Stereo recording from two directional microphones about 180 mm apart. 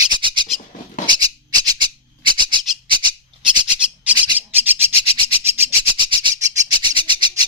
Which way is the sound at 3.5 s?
25° right (ahead or behind).